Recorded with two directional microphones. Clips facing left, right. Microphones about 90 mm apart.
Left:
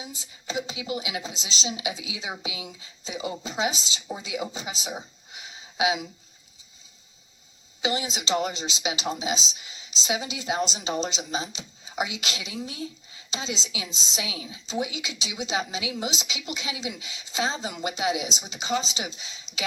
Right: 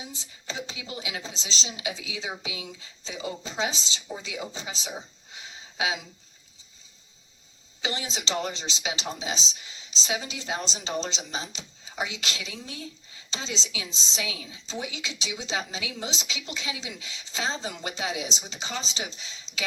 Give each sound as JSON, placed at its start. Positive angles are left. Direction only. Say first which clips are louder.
{"t": 0.1, "sound": "a woman's voice", "louder": "left 5 dB", "side_deg": 15}
{"t": 7.8, "sound": "a woman's voice", "louder": "left 4 dB", "side_deg": 20}